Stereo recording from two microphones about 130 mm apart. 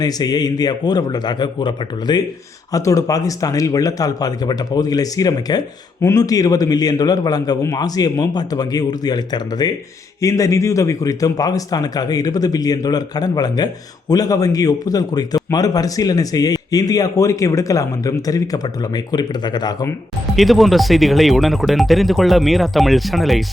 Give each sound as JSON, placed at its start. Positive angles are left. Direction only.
{"t": 0.0, "sound": "a man's voice", "side_deg": 30}
{"t": 20.3, "sound": "speech", "side_deg": 0}